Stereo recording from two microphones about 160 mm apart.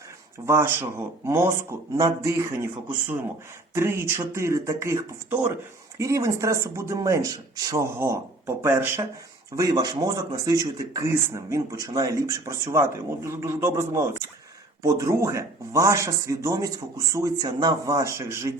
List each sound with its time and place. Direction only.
0.4 s speech: 15° right (ahead or behind)
3.8 s speech: 15° right (ahead or behind)